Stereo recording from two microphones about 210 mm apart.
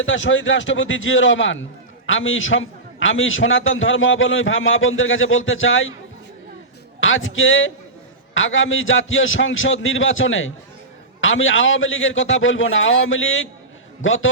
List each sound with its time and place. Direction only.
0.0 s a man's voice: 65° left (ahead or behind)
7.0 s a man's voice: 65° left (ahead or behind)